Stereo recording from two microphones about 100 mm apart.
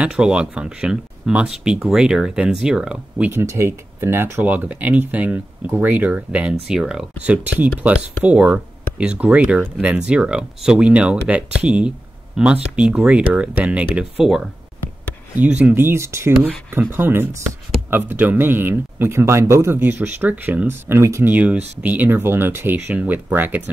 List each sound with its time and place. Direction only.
0.0 s speech: 10° right (ahead or behind)
3.3 s speech: 25° right (ahead or behind)
21.3 s speech: 15° right (ahead or behind)